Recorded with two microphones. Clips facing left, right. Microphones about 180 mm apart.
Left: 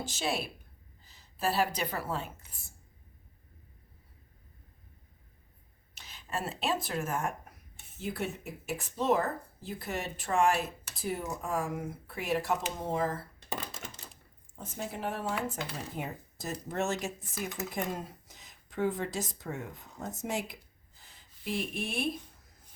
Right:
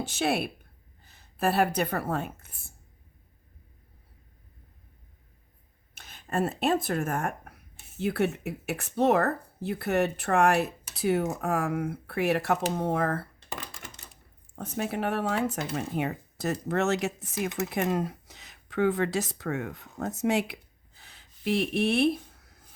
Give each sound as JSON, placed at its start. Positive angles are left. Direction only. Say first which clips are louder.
{"t": 0.0, "sound": "a woman's voice", "louder": "right 6 dB", "side_deg": -65}
{"t": 5.9, "sound": "speech", "louder": "right 6 dB", "side_deg": -55}
{"t": 14.5, "sound": "speech", "louder": "right 8 dB", "side_deg": -70}